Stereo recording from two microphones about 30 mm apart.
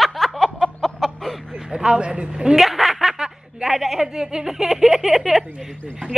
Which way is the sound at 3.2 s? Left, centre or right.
Right.